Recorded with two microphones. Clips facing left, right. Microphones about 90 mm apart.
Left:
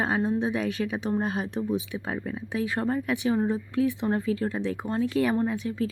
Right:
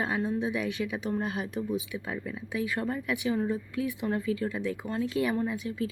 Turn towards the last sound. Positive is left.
turn(degrees=40)  # may be behind; listen again after turning